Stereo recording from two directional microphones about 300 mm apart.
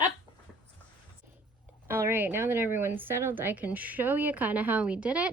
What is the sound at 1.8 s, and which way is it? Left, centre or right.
A woman's voice, centre.